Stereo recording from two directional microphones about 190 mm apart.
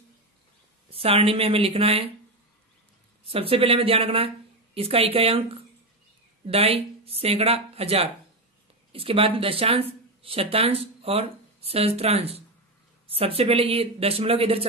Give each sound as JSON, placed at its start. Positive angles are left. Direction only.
{"t": 0.8, "sound": "a woman's voice", "side_deg": -30}
{"t": 3.3, "sound": "a woman's voice", "side_deg": -30}